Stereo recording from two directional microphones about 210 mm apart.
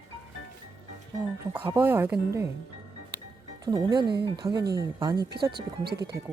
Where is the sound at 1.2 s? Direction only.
10° right (ahead or behind).